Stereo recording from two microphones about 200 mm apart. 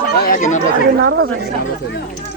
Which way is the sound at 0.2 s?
40° left (ahead or behind).